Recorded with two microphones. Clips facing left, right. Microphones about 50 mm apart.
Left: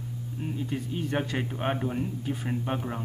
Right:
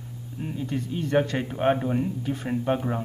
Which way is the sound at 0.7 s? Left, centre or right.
Centre.